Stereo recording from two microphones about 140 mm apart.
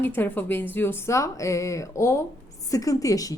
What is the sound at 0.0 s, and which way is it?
A woman's voice, 15° left (ahead or behind).